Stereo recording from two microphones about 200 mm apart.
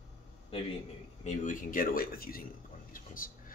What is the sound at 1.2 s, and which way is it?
Speech, 40° left (ahead or behind).